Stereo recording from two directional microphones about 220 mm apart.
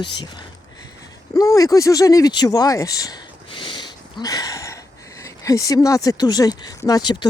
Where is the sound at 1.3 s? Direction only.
15° left (ahead or behind).